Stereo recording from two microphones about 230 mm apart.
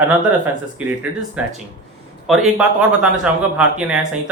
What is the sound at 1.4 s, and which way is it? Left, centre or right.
A man's voice, centre.